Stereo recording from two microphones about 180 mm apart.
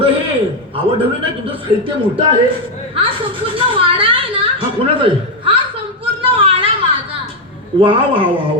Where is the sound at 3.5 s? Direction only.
30° right (ahead or behind).